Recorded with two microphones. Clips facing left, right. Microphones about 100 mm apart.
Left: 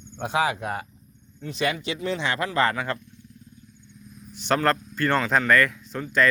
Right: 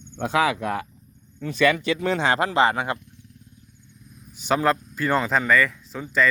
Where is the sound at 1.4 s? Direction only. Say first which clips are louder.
Right 6 dB; 65° right (ahead or behind).